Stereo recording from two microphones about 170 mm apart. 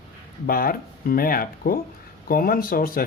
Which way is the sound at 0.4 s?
60° left (ahead or behind).